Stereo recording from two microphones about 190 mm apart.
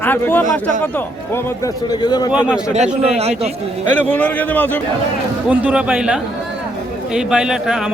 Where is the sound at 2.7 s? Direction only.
35° right (ahead or behind).